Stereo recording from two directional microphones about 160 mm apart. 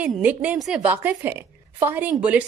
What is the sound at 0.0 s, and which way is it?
Speech, 10° right (ahead or behind).